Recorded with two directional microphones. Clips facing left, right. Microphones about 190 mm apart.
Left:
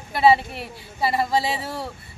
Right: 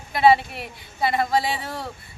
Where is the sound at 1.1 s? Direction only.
30° left (ahead or behind).